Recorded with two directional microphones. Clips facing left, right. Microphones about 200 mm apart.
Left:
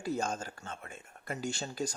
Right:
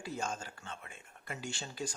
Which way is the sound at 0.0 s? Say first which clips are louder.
Left 5 dB; 40° left (ahead or behind).